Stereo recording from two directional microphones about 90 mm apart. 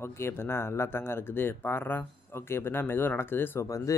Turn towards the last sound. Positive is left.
turn(degrees=40)  # may be behind; listen again after turning